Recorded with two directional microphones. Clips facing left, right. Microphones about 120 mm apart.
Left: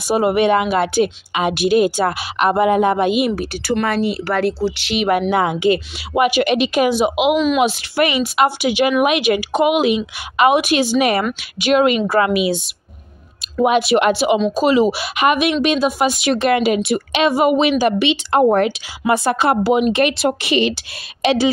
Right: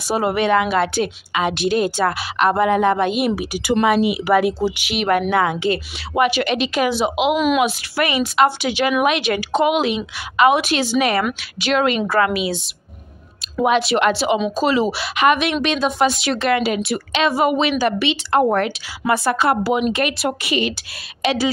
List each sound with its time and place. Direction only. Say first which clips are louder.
0.1 s a woman's voice: left 3 dB; 15° left (ahead or behind)
3.2 s speech: left 2 dB; centre (ahead or behind)
3.8 s speech: right 5 dB; 10° right (ahead or behind)
5.3 s a woman's voice: left 2 dB; 15° left (ahead or behind)
7.3 s speech: left 1 dB; 5° right (ahead or behind)
7.6 s a woman's voice: left 3 dB; 20° left (ahead or behind)
13.7 s a woman's voice: left 2 dB; 15° left (ahead or behind)